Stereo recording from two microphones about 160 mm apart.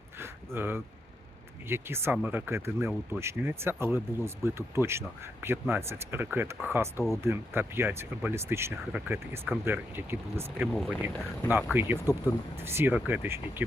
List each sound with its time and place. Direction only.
0.2 s a sound: 15° right (ahead or behind)
1.6 s speech: 15° right (ahead or behind)
10.8 s speech: centre (ahead or behind)
11.0 s speech: 10° right (ahead or behind)